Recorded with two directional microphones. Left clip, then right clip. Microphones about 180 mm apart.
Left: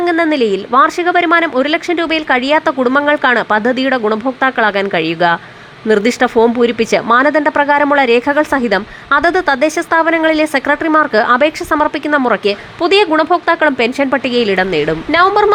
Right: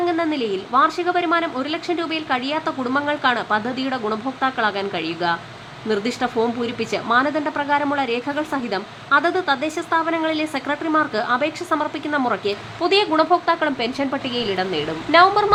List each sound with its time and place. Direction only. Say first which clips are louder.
0.0 s a woman's voice: left 9 dB; 35° left (ahead or behind)